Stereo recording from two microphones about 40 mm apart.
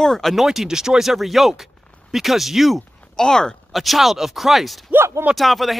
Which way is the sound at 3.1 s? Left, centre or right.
Centre.